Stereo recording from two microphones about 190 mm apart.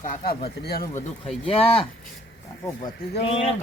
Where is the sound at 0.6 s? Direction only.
55° left (ahead or behind).